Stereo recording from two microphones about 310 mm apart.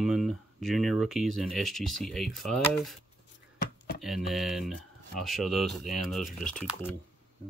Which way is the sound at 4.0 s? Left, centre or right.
Centre.